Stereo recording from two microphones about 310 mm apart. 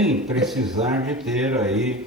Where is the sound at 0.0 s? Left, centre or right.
Centre.